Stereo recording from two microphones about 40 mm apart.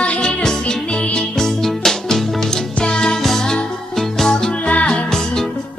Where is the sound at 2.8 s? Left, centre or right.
Left.